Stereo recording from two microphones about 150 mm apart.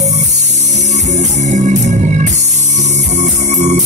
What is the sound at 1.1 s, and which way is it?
Music, 50° right (ahead or behind).